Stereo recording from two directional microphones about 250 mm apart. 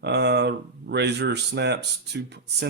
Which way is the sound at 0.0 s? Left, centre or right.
Right.